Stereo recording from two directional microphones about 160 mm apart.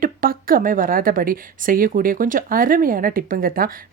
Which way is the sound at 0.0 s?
60° right (ahead or behind).